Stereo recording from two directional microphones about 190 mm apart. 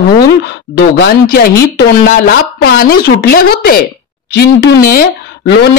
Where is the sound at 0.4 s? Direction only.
60° left (ahead or behind).